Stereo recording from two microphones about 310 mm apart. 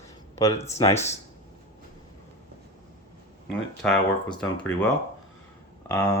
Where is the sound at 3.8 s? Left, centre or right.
Centre.